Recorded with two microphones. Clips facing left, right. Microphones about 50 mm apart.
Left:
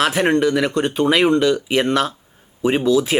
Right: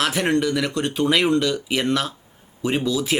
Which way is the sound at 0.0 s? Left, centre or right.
Centre.